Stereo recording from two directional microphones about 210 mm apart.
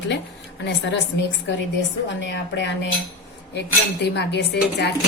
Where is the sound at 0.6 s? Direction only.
60° left (ahead or behind).